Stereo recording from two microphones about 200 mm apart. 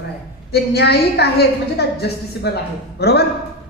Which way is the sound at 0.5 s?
55° left (ahead or behind).